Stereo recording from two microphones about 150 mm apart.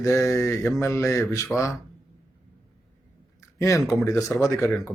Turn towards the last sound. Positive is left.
turn(degrees=20)  # may be behind; listen again after turning